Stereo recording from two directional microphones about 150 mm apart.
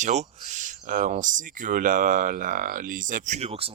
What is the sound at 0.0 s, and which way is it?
Speech, 50° right (ahead or behind).